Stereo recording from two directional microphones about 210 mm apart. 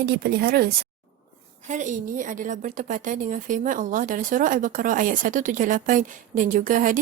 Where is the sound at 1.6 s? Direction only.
35° right (ahead or behind).